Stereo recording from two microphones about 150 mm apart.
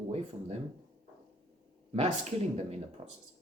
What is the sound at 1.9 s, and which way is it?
Speech, 45° right (ahead or behind).